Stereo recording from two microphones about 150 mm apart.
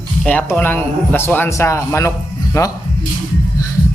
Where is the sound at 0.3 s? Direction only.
10° left (ahead or behind).